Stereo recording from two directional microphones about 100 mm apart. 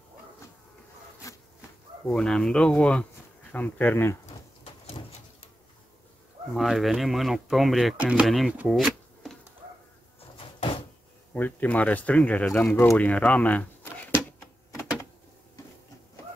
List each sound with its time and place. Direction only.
2.0 s speech: 10° left (ahead or behind)
6.5 s speech: centre (ahead or behind)
8.0 s speech: 10° right (ahead or behind)
8.3 s speech: centre (ahead or behind)
8.6 s shuffling cards: centre (ahead or behind)
10.3 s door: 60° left (ahead or behind)
11.3 s speech: 15° left (ahead or behind)